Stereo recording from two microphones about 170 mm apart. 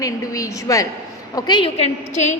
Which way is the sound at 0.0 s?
20° left (ahead or behind).